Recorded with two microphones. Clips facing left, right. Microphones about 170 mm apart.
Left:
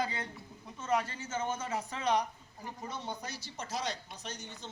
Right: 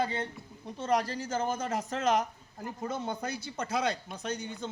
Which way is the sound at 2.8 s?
50° right (ahead or behind).